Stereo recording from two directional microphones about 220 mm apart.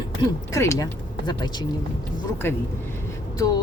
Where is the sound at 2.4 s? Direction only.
10° left (ahead or behind).